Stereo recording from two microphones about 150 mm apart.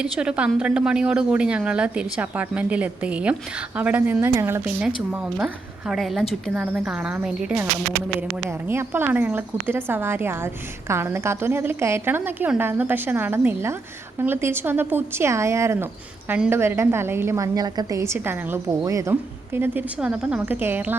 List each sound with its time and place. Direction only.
0.0 s a woman's voice: 5° right (ahead or behind)
5.9 s a woman's voice: centre (ahead or behind)